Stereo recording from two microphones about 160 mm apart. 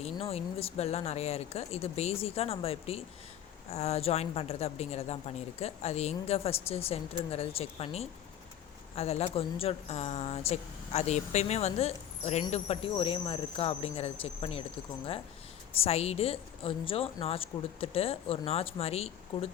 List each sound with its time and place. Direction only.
0.0 s speech: 40° left (ahead or behind)
15.7 s speech: 40° left (ahead or behind)